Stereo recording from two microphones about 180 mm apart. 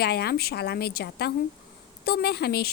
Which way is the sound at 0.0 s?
60° left (ahead or behind).